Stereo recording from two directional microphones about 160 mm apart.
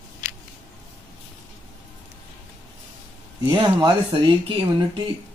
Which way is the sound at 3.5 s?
25° right (ahead or behind).